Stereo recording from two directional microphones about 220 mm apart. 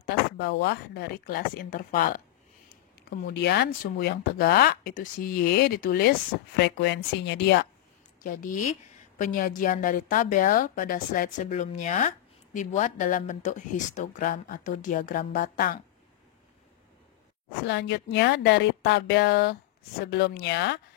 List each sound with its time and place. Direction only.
0.0 s speech: 50° left (ahead or behind)
8.2 s a woman's voice: 40° left (ahead or behind)
17.6 s speech: 50° left (ahead or behind)